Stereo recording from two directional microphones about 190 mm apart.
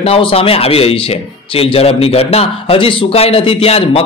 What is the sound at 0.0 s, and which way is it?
A man's voice, 30° left (ahead or behind).